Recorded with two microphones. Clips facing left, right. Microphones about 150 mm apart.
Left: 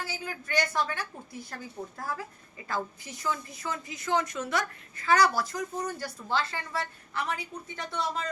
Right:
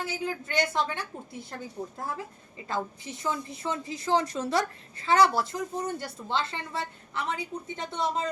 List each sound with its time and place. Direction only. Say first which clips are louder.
0.0 s a woman's voice: right 5 dB; 20° right (ahead or behind)